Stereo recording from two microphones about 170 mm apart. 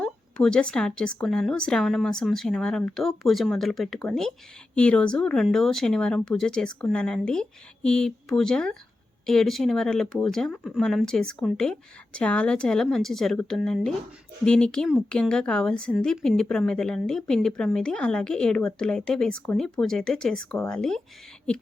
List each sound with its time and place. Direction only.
0.0 s speech: 5° left (ahead or behind)